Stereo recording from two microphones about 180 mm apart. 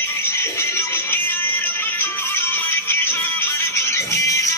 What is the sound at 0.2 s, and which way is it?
Music, 15° left (ahead or behind).